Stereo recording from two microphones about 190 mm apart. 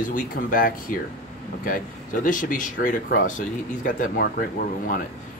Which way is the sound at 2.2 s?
45° left (ahead or behind).